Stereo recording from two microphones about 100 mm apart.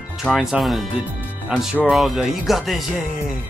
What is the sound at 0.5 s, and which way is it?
Speech, centre (ahead or behind).